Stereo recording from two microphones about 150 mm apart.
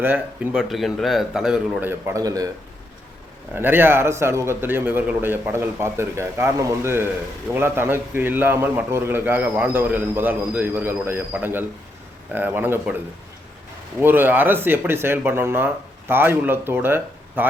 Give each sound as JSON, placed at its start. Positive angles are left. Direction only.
{"t": 0.0, "sound": "a man's voice", "side_deg": -15}
{"t": 0.7, "sound": "a man's voice", "side_deg": 0}
{"t": 3.5, "sound": "a man's voice", "side_deg": -15}
{"t": 14.0, "sound": "a man's voice", "side_deg": -15}